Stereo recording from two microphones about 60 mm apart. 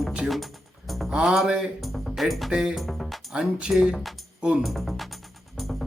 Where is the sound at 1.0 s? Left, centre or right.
Centre.